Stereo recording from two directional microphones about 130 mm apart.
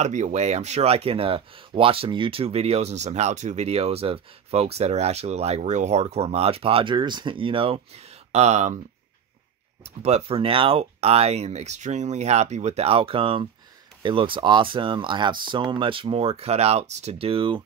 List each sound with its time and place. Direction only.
0.0 s speech: 65° right (ahead or behind)
9.8 s speech: 55° right (ahead or behind)